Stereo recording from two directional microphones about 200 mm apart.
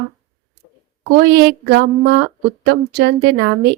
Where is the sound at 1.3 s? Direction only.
50° right (ahead or behind).